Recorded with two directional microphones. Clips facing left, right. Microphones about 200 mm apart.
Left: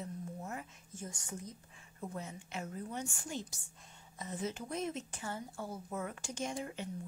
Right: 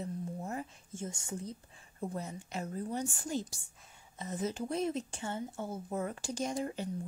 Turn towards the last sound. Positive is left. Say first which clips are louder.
# right 4 dB
turn(degrees=-40)  # may be behind; listen again after turning